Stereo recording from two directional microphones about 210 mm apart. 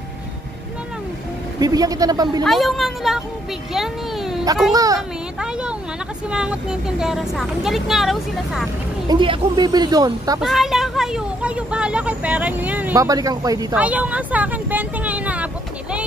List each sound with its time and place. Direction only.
1.6 s speech: 15° right (ahead or behind)
2.4 s a woman's voice: centre (ahead or behind)
4.7 s speech: 15° right (ahead or behind)
5.4 s a sound: 5° right (ahead or behind)
6.3 s a woman's voice: 5° right (ahead or behind)
9.1 s speech: 20° right (ahead or behind)
10.4 s speech: centre (ahead or behind); by 13.7 s 15° right (ahead or behind)
13.7 s vehicle: 5° right (ahead or behind)